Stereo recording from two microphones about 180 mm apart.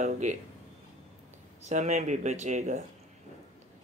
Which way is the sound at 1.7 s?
40° right (ahead or behind).